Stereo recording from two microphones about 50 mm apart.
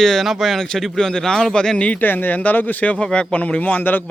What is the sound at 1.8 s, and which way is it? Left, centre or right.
Speech, left.